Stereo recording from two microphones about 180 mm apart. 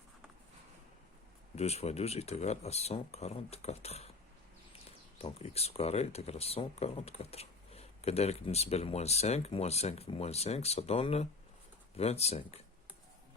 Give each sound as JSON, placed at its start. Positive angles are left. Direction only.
{"t": 1.5, "sound": "speech", "side_deg": 35}